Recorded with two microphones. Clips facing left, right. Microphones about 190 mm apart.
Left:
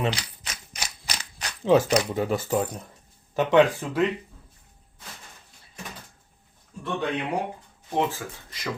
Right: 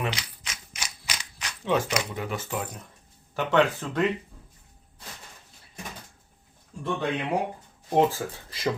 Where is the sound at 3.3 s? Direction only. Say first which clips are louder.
Left 4 dB; 15° left (ahead or behind).